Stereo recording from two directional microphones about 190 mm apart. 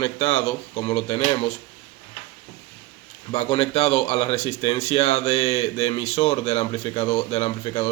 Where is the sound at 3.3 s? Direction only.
30° left (ahead or behind).